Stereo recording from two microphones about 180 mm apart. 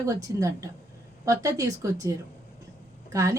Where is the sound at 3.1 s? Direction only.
15° right (ahead or behind).